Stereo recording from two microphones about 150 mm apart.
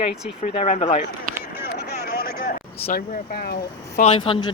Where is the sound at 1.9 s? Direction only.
90° left.